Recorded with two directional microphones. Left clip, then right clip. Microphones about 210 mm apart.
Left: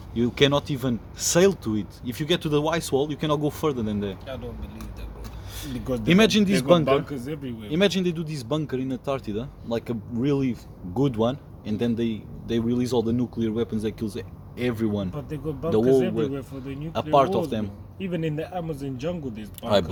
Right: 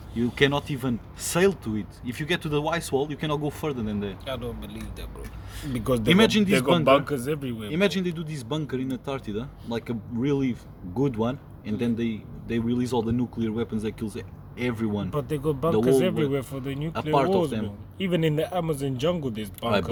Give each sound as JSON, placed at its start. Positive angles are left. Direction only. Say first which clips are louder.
{"t": 0.2, "sound": "speech", "louder": "left 2 dB", "side_deg": 10}
{"t": 5.8, "sound": "speech", "louder": "right 4 dB", "side_deg": -45}
{"t": 6.1, "sound": "speech", "louder": "left 1 dB", "side_deg": 5}
{"t": 6.8, "sound": "speech", "louder": "right 3 dB", "side_deg": -45}
{"t": 7.7, "sound": "speech", "louder": "left 3 dB", "side_deg": 5}
{"t": 15.1, "sound": "speech", "louder": "right 6 dB", "side_deg": -45}
{"t": 16.9, "sound": "speech", "louder": "left 3 dB", "side_deg": 5}
{"t": 17.9, "sound": "speech", "louder": "right 4 dB", "side_deg": -50}